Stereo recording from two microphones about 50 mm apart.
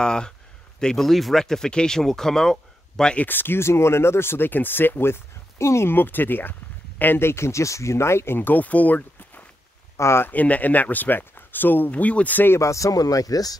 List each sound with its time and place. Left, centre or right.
0.0 s speech: centre
3.2 s speech: left
5.9 s speech: left
7.2 s speech: left
8.4 s speech: left
9.9 s speech: left
10.2 s speech: left
11.9 s speech: left
12.5 s speech: left